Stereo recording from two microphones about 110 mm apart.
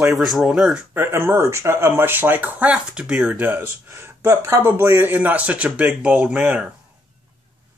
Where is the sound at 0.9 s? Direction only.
20° right (ahead or behind).